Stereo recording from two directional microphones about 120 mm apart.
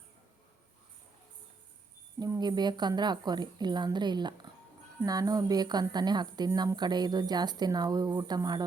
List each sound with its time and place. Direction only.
2.1 s a woman's voice: 35° right (ahead or behind)